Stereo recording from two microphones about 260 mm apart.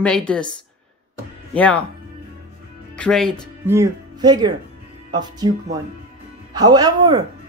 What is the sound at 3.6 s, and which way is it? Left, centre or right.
A woman's voice, centre.